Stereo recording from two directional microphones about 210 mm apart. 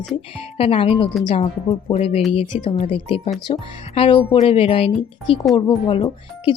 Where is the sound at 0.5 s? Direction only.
25° left (ahead or behind).